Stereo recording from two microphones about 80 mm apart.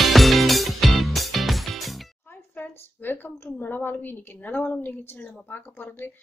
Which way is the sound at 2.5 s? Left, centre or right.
Left.